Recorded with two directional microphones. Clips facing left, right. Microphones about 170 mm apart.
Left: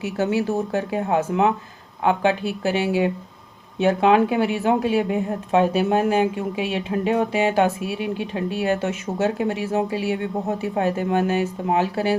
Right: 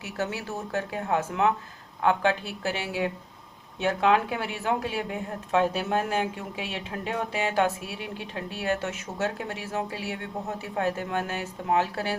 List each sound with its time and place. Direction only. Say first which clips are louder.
0.0 s speech: left 10 dB; 20° left (ahead or behind)